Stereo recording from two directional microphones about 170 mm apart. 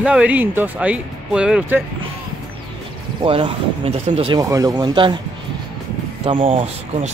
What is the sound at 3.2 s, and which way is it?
Speech, 30° right (ahead or behind).